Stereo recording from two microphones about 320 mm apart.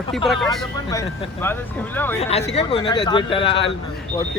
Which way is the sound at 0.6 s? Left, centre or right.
Centre.